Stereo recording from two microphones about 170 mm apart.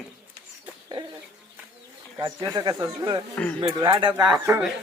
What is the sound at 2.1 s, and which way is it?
Speech, 20° right (ahead or behind).